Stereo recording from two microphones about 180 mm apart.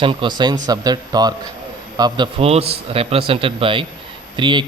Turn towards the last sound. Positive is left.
turn(degrees=-25)  # may be behind; listen again after turning